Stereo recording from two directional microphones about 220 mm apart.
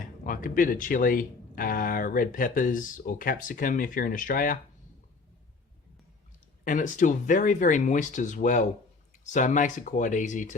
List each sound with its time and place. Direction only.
0.3 s speech: 40° left (ahead or behind)
6.7 s speech: 35° left (ahead or behind)